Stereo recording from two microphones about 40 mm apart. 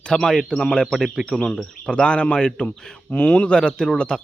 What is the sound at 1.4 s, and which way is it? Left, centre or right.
Speech, centre.